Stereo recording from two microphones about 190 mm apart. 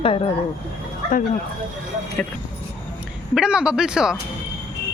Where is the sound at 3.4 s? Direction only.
5° right (ahead or behind).